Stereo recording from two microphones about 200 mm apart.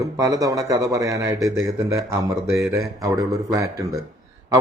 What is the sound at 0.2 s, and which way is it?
A man's voice, 15° right (ahead or behind).